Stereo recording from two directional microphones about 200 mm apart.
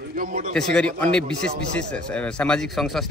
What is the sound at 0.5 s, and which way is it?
A man's voice, 5° left (ahead or behind).